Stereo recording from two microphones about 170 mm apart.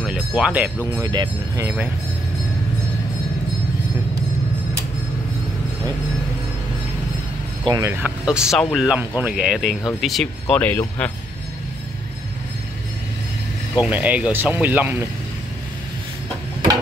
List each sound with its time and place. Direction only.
0.4 s speech: 10° right (ahead or behind)
0.9 s speech: 25° right (ahead or behind)
7.6 s speech: 20° right (ahead or behind); by 11.1 s 10° left (ahead or behind)
13.7 s speech: 10° right (ahead or behind)